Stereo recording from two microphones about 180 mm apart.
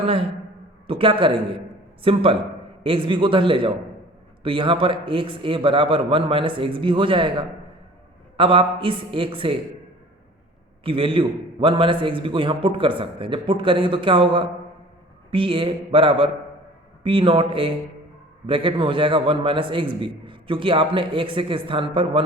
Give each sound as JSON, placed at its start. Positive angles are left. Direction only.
{"t": 0.0, "sound": "a man's voice", "side_deg": -30}
{"t": 10.8, "sound": "a man's voice", "side_deg": -30}